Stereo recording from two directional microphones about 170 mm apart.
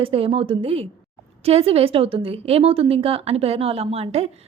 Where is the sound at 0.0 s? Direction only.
35° right (ahead or behind).